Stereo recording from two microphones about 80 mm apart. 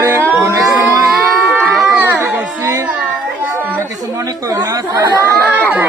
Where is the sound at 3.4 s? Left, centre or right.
Right.